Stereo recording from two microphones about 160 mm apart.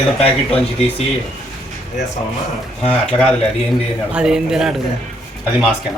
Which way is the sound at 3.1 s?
5° left (ahead or behind).